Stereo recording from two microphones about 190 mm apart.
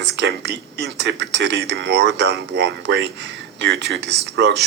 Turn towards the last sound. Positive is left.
turn(degrees=-65)  # may be behind; listen again after turning